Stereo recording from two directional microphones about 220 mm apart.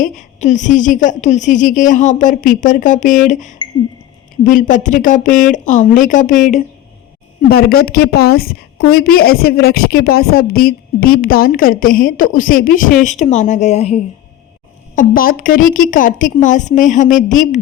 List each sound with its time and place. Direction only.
0.0 s a woman's voice: 35° left (ahead or behind)
7.4 s a woman's voice: 45° left (ahead or behind)
14.9 s a woman's voice: 40° left (ahead or behind)